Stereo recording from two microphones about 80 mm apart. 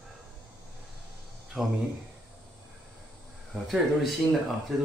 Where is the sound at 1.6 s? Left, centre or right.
Centre.